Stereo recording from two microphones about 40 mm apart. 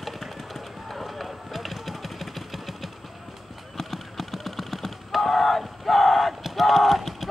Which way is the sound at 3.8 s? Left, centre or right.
Centre.